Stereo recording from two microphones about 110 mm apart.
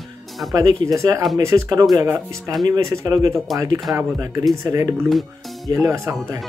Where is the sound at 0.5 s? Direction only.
30° right (ahead or behind).